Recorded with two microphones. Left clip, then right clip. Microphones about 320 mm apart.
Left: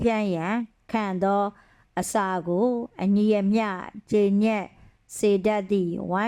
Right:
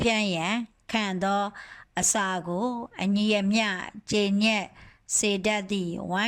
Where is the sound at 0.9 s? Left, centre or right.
Centre.